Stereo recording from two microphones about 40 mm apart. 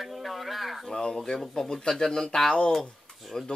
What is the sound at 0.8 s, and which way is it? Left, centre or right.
Speech, centre.